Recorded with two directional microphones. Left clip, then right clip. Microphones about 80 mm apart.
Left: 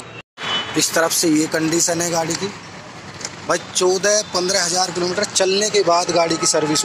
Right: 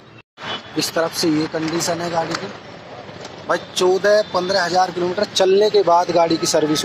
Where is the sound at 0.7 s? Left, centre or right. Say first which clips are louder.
Left 1 dB; centre.